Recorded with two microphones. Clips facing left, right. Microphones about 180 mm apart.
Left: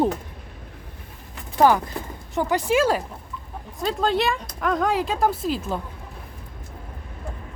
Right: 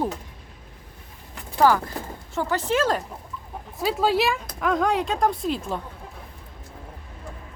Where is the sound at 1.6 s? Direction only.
20° left (ahead or behind).